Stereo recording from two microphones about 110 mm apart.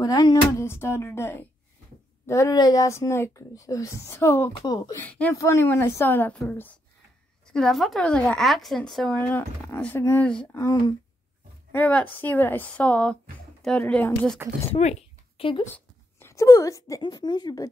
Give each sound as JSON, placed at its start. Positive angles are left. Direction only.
{"t": 0.0, "sound": "speech", "side_deg": 35}
{"t": 5.0, "sound": "speech", "side_deg": 10}
{"t": 5.3, "sound": "speech", "side_deg": 25}
{"t": 7.5, "sound": "a woman's voice", "side_deg": 5}
{"t": 9.9, "sound": "speech", "side_deg": 20}
{"t": 10.2, "sound": "speech", "side_deg": 10}
{"t": 10.5, "sound": "speech", "side_deg": 30}
{"t": 11.7, "sound": "speech", "side_deg": 15}
{"t": 14.4, "sound": "speech", "side_deg": -20}
{"t": 14.8, "sound": "a sound", "side_deg": 90}
{"t": 15.7, "sound": "a sound", "side_deg": 25}
{"t": 17.0, "sound": "a woman's voice", "side_deg": 40}